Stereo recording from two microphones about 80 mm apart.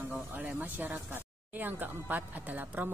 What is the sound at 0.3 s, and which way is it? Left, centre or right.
A woman's voice, right.